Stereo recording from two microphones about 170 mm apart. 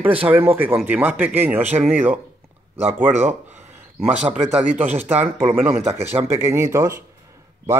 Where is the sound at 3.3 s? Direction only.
40° right (ahead or behind).